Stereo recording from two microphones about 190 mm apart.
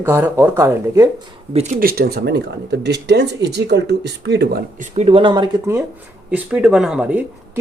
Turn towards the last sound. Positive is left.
turn(degrees=-5)  # may be behind; listen again after turning